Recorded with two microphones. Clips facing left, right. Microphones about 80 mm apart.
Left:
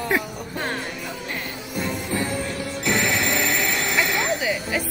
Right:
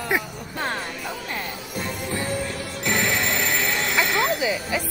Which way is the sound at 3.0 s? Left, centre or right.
Right.